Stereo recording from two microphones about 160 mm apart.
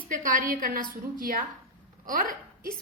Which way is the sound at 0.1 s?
55° right (ahead or behind).